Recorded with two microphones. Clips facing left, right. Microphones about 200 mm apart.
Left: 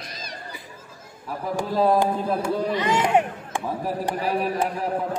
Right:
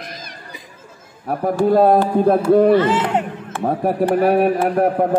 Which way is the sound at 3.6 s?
60° right (ahead or behind).